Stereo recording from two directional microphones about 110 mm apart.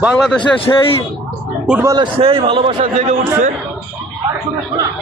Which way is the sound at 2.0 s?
55° right (ahead or behind).